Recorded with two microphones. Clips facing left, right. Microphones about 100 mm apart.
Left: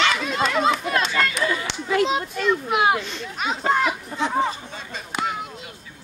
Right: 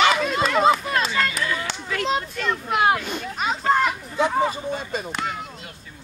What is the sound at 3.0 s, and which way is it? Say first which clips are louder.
A child's voice: right 2 dB; 10° right (ahead or behind).